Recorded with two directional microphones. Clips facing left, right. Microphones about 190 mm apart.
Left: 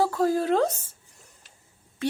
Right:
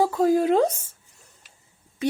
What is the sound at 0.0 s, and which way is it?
Speech, 15° right (ahead or behind).